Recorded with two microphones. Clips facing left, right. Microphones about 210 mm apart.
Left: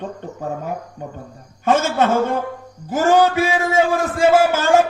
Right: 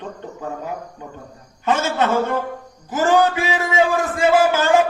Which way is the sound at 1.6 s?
50° left (ahead or behind).